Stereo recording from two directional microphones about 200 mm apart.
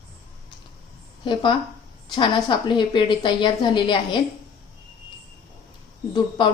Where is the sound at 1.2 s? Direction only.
25° left (ahead or behind).